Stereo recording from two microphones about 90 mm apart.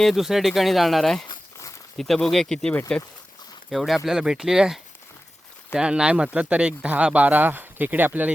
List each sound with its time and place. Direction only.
0.0 s speech: centre (ahead or behind); by 8.3 s 20° right (ahead or behind)